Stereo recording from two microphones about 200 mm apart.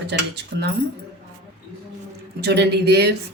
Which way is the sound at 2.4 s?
55° right (ahead or behind).